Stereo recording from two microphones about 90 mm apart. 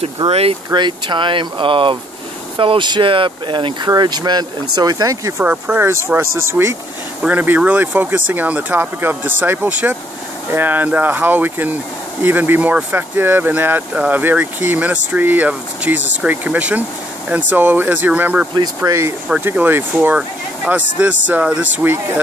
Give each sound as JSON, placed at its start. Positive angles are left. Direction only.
{"t": 0.2, "sound": "speech", "side_deg": -40}
{"t": 0.7, "sound": "speech", "side_deg": -60}
{"t": 3.9, "sound": "speech", "side_deg": -50}
{"t": 5.4, "sound": "speech", "side_deg": -15}
{"t": 5.9, "sound": "speech", "side_deg": -30}
{"t": 18.9, "sound": "speech", "side_deg": -35}
{"t": 19.4, "sound": "speech", "side_deg": -20}